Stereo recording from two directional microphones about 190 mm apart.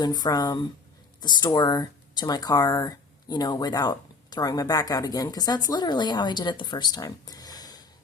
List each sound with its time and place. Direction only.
0.0 s speech: 20° left (ahead or behind)